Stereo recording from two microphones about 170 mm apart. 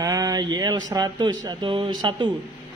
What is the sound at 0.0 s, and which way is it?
Speech, 20° right (ahead or behind).